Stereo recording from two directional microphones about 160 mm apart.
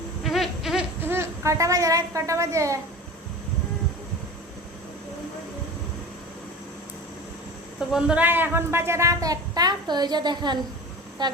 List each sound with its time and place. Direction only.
0.2 s a sound: centre (ahead or behind)
1.0 s a child's voice: 15° right (ahead or behind)
7.9 s a woman's voice: 5° right (ahead or behind); by 10.6 s 25° right (ahead or behind)